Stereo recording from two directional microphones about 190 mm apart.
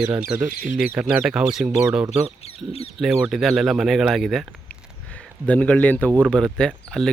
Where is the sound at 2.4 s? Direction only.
30° left (ahead or behind).